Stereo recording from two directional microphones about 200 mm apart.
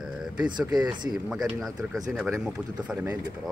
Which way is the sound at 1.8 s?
15° right (ahead or behind).